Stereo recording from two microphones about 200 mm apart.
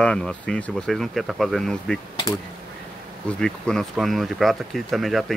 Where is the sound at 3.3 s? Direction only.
5° left (ahead or behind).